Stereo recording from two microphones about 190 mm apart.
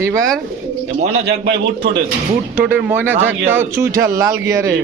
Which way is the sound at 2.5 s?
10° right (ahead or behind).